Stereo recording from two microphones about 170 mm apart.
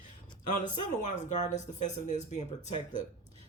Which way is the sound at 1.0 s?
45° left (ahead or behind).